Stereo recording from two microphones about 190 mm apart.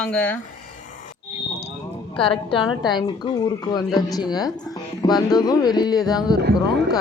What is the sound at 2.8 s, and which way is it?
Speech, 25° left (ahead or behind).